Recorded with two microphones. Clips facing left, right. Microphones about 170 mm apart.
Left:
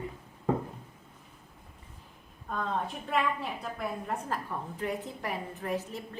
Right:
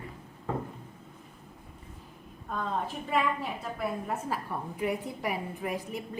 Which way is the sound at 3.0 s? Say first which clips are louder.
Right 1 dB; centre (ahead or behind).